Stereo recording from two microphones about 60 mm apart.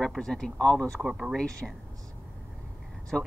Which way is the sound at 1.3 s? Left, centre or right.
Centre.